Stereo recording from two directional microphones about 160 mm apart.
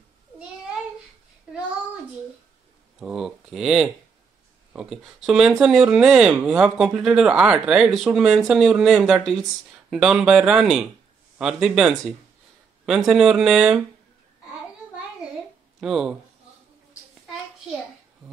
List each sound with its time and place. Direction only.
3.0 s speech: 5° right (ahead or behind)
15.8 s speech: 5° right (ahead or behind)